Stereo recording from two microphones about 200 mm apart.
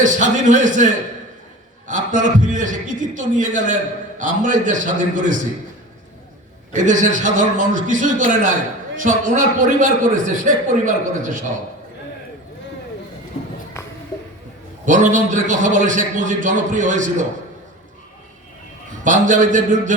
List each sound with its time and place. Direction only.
0.0 s a man's voice: 40° right (ahead or behind)
1.9 s a man's voice: 40° right (ahead or behind)
6.8 s a man's voice: 40° right (ahead or behind)
14.8 s a man's voice: 40° right (ahead or behind)
19.0 s a man's voice: 40° right (ahead or behind)